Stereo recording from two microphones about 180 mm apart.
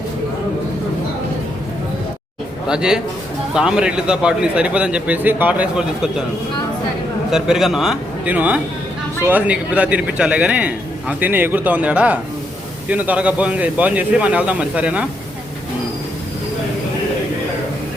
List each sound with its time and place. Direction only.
2.6 s a man's voice: 5° right (ahead or behind)
7.3 s a man's voice: 5° right (ahead or behind)